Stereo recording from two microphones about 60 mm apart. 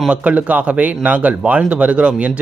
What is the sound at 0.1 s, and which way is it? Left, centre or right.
A man's voice, right.